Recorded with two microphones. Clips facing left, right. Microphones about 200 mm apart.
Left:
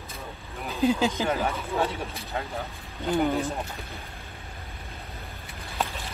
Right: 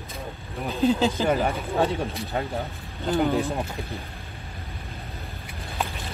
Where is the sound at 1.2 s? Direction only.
15° right (ahead or behind).